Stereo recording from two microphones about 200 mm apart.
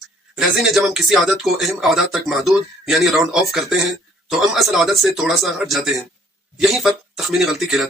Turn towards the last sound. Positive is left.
turn(degrees=0)  # may be behind; listen again after turning